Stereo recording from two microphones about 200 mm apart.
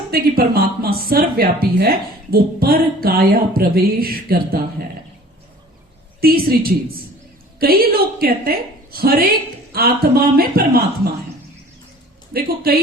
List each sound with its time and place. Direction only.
0.1 s speech: 50° right (ahead or behind)
6.1 s speech: 50° right (ahead or behind)
12.3 s speech: 50° right (ahead or behind)